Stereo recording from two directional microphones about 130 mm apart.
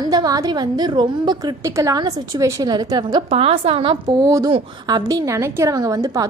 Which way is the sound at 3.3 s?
45° right (ahead or behind).